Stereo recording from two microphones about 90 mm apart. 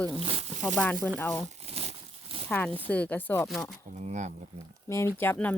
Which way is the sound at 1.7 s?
90° right.